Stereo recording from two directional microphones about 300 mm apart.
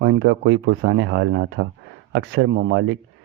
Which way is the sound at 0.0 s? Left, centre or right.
Right.